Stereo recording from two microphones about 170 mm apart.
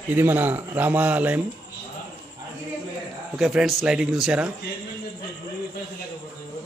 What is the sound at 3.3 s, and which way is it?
A man's voice, 5° right (ahead or behind).